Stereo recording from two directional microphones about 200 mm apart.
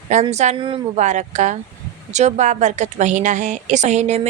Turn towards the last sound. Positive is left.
turn(degrees=-35)  # may be behind; listen again after turning